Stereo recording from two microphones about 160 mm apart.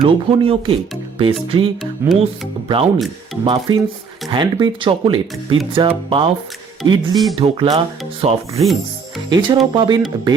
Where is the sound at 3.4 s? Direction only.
30° right (ahead or behind).